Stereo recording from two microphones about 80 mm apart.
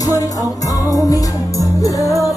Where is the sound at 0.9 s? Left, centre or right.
Left.